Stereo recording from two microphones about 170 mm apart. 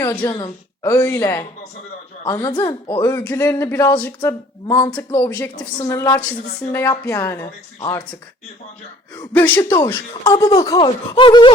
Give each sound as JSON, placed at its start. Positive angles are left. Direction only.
{"t": 0.0, "sound": "a woman's voice", "side_deg": 15}
{"t": 9.3, "sound": "speech", "side_deg": 10}